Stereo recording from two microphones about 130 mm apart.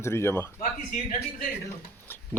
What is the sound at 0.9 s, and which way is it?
Speech, 90° left.